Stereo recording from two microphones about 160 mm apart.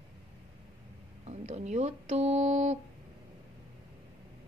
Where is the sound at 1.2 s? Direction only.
45° right (ahead or behind).